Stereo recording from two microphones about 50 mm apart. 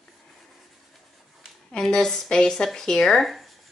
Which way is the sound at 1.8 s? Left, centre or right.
Centre.